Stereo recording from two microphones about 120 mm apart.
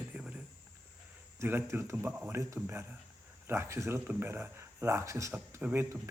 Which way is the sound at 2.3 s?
25° right (ahead or behind).